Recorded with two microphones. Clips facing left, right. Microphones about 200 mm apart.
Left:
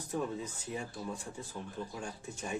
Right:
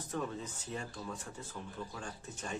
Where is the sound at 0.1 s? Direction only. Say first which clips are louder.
Left 3 dB; 10° left (ahead or behind).